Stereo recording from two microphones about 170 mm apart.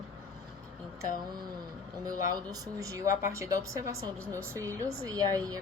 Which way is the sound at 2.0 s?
20° right (ahead or behind).